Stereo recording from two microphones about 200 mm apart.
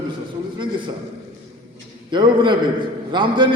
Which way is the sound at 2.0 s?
25° right (ahead or behind).